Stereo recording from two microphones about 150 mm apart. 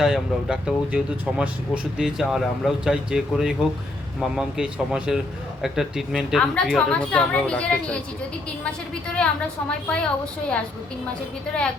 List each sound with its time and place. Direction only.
0.0 s speech: 5° right (ahead or behind)
9.1 s a woman's voice: 5° left (ahead or behind)